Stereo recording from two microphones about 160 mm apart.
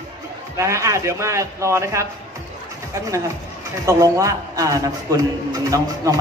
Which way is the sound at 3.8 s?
20° right (ahead or behind).